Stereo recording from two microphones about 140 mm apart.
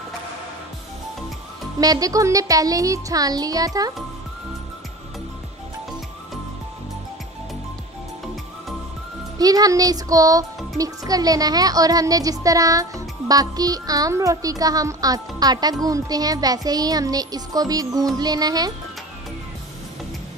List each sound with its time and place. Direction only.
1.8 s speech: 25° right (ahead or behind)
9.4 s speech: 25° right (ahead or behind)